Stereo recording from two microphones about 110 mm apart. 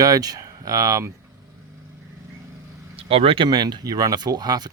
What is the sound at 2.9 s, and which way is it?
Speech, 60° right (ahead or behind).